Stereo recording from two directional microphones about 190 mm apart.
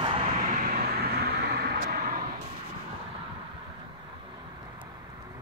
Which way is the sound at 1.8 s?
55° right (ahead or behind).